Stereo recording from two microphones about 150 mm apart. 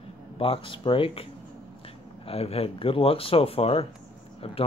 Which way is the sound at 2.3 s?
40° left (ahead or behind).